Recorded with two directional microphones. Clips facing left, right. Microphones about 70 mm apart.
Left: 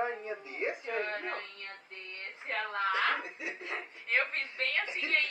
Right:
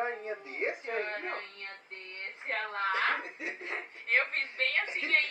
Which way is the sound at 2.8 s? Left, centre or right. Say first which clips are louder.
Even; right.